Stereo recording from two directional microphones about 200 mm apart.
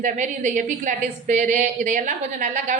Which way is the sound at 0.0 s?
40° right (ahead or behind).